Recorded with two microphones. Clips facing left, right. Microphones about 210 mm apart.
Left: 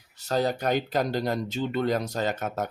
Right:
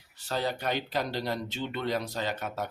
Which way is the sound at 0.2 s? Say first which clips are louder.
Left 6 dB; 45° left (ahead or behind).